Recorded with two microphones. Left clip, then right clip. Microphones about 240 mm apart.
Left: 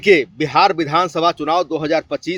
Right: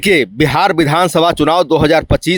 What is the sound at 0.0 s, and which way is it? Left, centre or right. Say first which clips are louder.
Speech: right 2 dB; right.